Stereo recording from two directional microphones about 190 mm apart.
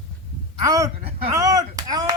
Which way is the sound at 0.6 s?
20° right (ahead or behind).